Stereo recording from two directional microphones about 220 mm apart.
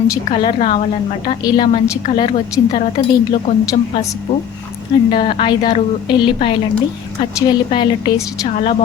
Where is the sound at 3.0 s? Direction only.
15° left (ahead or behind).